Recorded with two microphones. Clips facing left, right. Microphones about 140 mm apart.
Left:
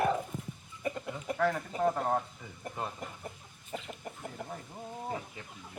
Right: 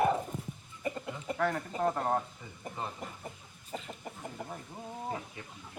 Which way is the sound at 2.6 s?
Centre (ahead or behind).